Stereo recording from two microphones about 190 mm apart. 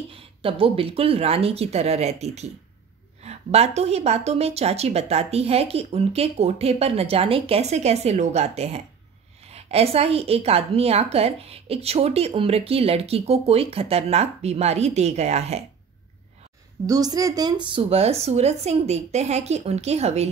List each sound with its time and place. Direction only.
0.1 s a woman's voice: 30° right (ahead or behind)
16.8 s a woman's voice: 20° right (ahead or behind)